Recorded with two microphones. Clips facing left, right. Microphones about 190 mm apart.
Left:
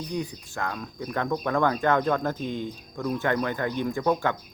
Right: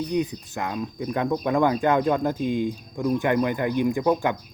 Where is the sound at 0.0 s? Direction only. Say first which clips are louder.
Right 6 dB; 20° right (ahead or behind).